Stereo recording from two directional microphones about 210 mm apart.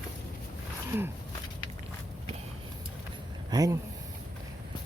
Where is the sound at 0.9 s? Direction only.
10° right (ahead or behind).